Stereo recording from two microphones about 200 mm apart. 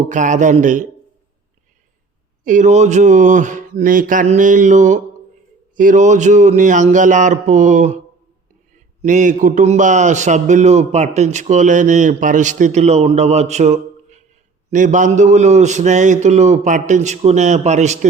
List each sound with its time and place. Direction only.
0.1 s a man's voice: 40° right (ahead or behind)
2.4 s a man's voice: 40° right (ahead or behind)